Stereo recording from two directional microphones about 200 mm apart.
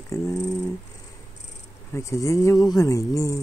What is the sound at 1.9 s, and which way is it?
Speech, 15° left (ahead or behind).